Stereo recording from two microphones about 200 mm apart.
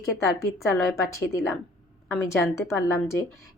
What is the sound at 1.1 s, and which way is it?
A woman's voice, 15° left (ahead or behind).